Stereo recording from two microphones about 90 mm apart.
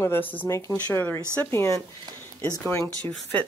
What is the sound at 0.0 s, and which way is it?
Speech, 25° left (ahead or behind).